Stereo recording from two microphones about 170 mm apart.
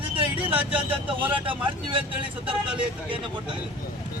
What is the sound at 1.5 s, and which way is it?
Speech, 30° right (ahead or behind).